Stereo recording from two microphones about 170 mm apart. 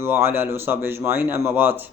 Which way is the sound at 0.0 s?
15° right (ahead or behind).